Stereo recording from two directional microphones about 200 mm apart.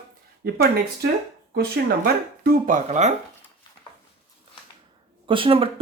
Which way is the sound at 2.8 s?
35° right (ahead or behind).